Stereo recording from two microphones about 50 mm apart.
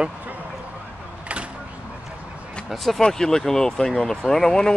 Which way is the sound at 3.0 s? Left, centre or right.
Centre.